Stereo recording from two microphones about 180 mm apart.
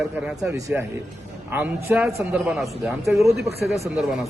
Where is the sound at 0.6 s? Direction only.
20° right (ahead or behind).